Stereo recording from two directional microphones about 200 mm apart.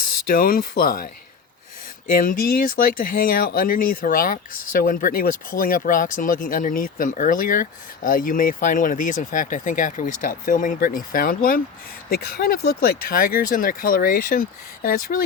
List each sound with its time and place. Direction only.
0.3 s speech: 45° left (ahead or behind)
2.0 s speech: 45° left (ahead or behind)